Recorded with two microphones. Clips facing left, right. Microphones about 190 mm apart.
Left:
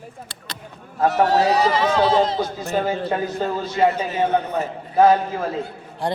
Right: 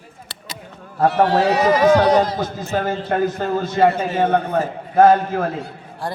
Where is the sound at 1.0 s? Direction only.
40° left (ahead or behind).